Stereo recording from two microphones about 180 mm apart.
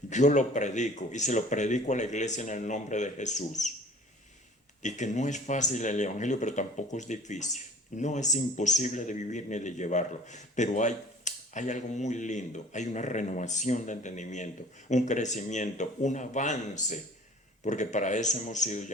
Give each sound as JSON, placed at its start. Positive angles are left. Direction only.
{"t": 0.1, "sound": "speech", "side_deg": 40}
{"t": 4.8, "sound": "speech", "side_deg": 40}